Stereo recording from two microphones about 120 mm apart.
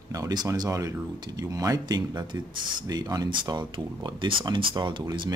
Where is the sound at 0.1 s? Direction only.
35° right (ahead or behind).